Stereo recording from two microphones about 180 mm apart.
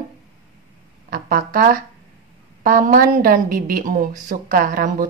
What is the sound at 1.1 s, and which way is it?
A woman's voice, 50° right (ahead or behind).